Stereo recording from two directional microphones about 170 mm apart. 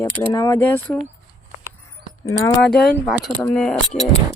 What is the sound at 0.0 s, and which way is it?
Speech, 15° left (ahead or behind).